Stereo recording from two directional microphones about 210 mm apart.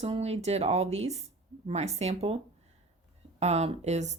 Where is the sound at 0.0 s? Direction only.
30° right (ahead or behind).